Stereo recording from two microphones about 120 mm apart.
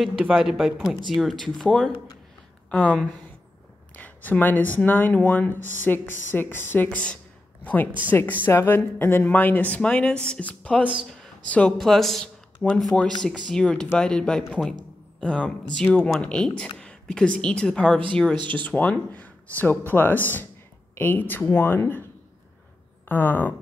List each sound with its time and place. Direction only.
0.2 s speech: 5° right (ahead or behind); by 22.0 s 20° left (ahead or behind)
23.0 s speech: 15° left (ahead or behind)